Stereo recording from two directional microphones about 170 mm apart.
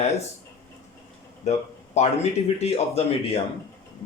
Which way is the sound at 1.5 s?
45° left (ahead or behind).